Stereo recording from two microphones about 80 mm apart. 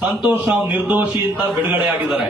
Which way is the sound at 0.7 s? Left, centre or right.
Right.